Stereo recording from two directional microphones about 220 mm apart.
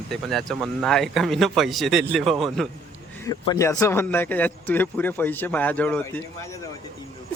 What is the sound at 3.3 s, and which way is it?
Speech, 15° left (ahead or behind).